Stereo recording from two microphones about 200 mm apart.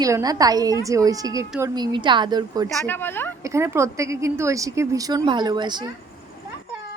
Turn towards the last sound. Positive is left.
turn(degrees=-20)  # may be behind; listen again after turning